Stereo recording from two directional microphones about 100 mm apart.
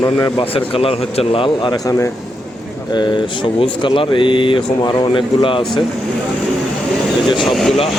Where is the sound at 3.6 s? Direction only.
65° left (ahead or behind); by 5.2 s 45° left (ahead or behind).